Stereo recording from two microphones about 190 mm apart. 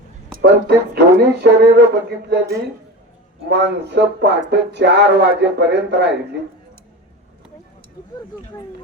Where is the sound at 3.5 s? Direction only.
65° right (ahead or behind).